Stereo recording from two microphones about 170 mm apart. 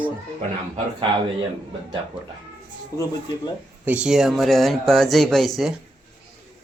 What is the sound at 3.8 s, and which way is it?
Speech, 5° right (ahead or behind).